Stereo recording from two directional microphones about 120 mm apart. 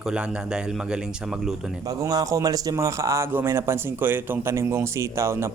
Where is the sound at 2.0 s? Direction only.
30° right (ahead or behind).